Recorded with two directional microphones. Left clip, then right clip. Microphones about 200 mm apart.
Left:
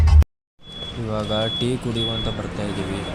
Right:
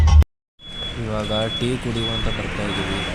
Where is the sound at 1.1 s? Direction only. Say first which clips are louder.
Even; centre (ahead or behind).